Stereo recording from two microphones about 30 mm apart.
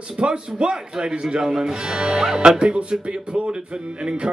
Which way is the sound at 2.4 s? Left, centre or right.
Right.